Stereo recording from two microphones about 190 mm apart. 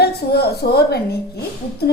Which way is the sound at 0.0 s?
55° left (ahead or behind).